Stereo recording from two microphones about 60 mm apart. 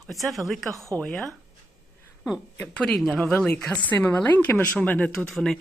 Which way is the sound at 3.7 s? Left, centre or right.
Left.